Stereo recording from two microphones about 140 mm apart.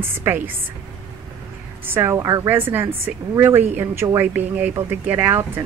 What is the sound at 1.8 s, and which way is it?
A woman's voice, 15° right (ahead or behind).